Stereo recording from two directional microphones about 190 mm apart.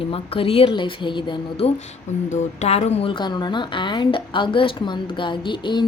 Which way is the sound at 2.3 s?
35° left (ahead or behind).